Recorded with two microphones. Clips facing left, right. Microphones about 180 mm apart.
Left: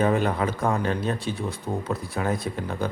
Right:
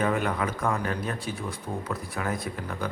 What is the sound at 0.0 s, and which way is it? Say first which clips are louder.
A man's voice: left 4 dB; 30° left (ahead or behind).